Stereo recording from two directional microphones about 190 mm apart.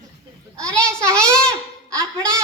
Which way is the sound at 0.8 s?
5° left (ahead or behind).